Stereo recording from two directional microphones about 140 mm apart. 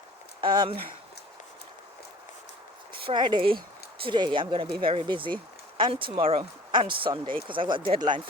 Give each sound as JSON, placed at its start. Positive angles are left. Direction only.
{"t": 0.4, "sound": "speech", "side_deg": -35}
{"t": 3.0, "sound": "speech", "side_deg": -35}